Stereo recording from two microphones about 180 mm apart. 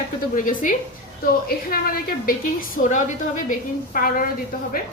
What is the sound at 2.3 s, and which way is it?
A woman's voice, 50° left (ahead or behind).